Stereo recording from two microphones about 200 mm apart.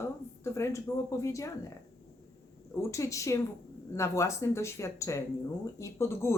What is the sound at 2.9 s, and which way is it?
Speech, 15° left (ahead or behind).